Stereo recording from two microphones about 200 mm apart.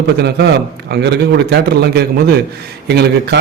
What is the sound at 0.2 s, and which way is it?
A man's voice, 55° right (ahead or behind).